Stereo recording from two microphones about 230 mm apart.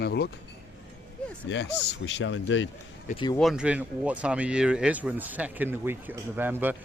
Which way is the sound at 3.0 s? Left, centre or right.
Left.